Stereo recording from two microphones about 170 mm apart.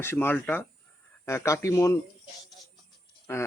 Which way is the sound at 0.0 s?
15° left (ahead or behind).